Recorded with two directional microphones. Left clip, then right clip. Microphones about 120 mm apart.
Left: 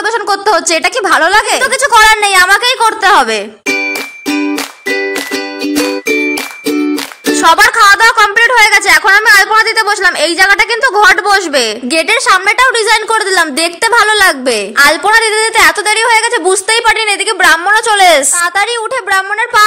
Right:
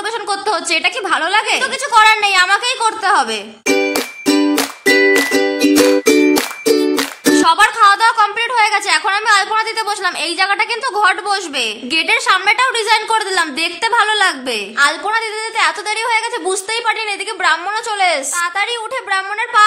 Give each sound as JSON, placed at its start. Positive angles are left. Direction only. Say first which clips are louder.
{"t": 0.3, "sound": "a woman's voice", "louder": "left 6 dB", "side_deg": 50}
{"t": 4.3, "sound": "music", "louder": "right 1 dB", "side_deg": -10}
{"t": 7.4, "sound": "music", "louder": "left 6 dB", "side_deg": 50}
{"t": 8.0, "sound": "a woman's voice", "louder": "left 7 dB", "side_deg": 30}
{"t": 16.0, "sound": "a woman's voice", "louder": "left 8 dB", "side_deg": 40}